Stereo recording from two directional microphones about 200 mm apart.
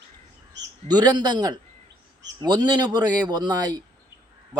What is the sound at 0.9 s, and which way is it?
Speech, 20° right (ahead or behind).